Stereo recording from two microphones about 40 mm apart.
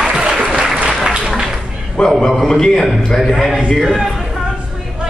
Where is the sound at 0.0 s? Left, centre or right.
Centre.